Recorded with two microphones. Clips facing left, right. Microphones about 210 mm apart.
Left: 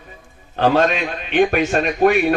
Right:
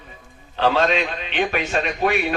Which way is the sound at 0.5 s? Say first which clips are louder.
Left 3 dB; 50° left (ahead or behind).